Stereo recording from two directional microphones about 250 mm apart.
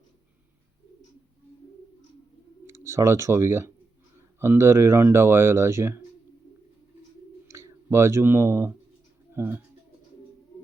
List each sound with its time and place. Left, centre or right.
2.6 s speech: centre
7.4 s speech: centre